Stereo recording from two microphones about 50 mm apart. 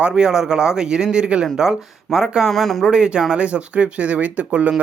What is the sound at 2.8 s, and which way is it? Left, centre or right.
Speech, centre.